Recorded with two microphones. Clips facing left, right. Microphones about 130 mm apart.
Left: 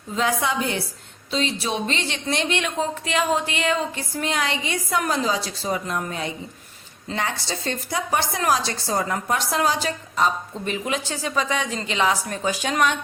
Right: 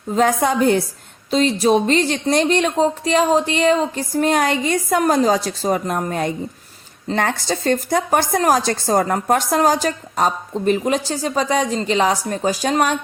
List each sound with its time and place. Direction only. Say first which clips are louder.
0.1 s a woman's voice: right 7 dB; 45° right (ahead or behind)